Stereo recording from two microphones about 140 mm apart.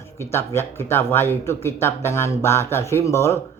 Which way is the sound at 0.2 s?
20° left (ahead or behind).